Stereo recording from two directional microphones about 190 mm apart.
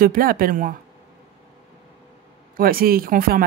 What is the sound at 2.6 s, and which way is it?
Speech, 50° right (ahead or behind).